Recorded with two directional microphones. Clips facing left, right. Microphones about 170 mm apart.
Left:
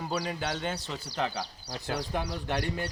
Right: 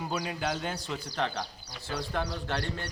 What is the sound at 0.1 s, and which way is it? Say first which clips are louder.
A man's voice: left 1 dB; centre (ahead or behind).